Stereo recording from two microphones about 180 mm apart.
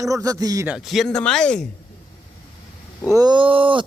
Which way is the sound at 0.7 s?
Centre (ahead or behind).